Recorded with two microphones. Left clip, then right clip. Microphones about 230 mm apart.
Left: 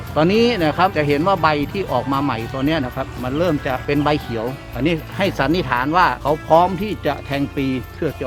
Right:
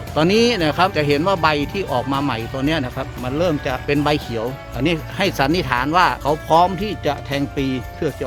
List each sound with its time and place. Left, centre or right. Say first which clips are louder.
0.1 s speech: even; right